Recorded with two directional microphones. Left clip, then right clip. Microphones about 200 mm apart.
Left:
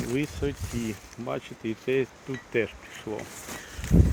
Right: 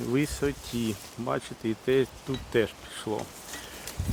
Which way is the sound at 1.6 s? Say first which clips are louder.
Right 1 dB; 60° right (ahead or behind).